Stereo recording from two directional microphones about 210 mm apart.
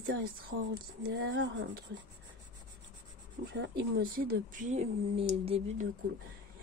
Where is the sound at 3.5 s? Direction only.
55° right (ahead or behind).